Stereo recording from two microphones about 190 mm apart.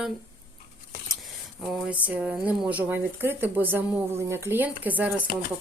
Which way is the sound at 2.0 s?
5° right (ahead or behind).